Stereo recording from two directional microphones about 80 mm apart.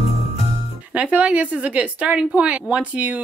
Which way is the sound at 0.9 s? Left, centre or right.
Centre.